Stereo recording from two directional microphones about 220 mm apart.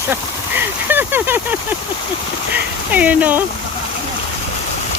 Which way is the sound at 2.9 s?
5° right (ahead or behind).